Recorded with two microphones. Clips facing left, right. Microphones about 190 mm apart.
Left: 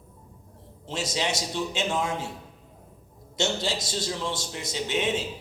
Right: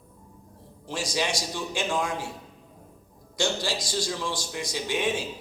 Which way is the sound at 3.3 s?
25° left (ahead or behind).